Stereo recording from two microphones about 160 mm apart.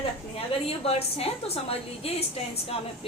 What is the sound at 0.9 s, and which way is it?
A woman's voice, 40° left (ahead or behind).